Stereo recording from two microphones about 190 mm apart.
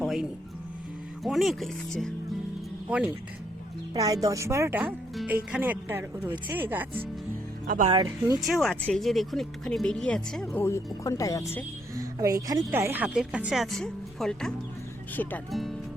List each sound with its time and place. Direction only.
0.0 s music: centre (ahead or behind)
1.2 s speech: centre (ahead or behind)
3.9 s a woman's voice: 20° right (ahead or behind)
7.9 s speech: 25° right (ahead or behind)
8.4 s speech: centre (ahead or behind); by 11.6 s 15° left (ahead or behind)
11.9 s speech: 15° right (ahead or behind); by 15.7 s 5° left (ahead or behind)